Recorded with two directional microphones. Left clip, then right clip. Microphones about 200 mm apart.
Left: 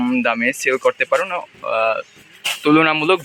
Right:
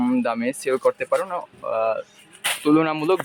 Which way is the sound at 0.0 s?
5° right (ahead or behind).